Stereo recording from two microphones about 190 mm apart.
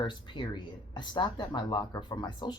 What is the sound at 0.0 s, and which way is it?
Speech, 25° left (ahead or behind).